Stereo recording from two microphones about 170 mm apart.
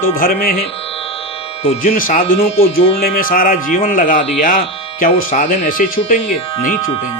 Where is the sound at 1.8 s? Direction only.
55° left (ahead or behind).